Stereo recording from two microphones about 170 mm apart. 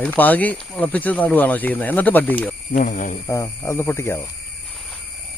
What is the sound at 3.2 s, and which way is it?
Speech, 20° left (ahead or behind).